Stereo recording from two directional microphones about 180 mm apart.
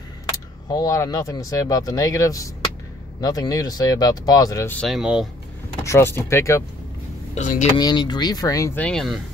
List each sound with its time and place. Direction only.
0.7 s speech: 20° left (ahead or behind)
4.7 s speech: centre (ahead or behind)
5.9 s speech: 15° left (ahead or behind)
7.3 s speech: 40° left (ahead or behind)
7.7 s speech: 25° left (ahead or behind)
8.8 s speech: centre (ahead or behind)